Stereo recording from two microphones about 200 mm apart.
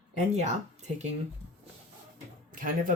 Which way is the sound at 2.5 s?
45° right (ahead or behind).